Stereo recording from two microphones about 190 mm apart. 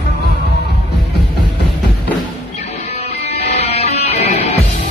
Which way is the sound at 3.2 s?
35° left (ahead or behind).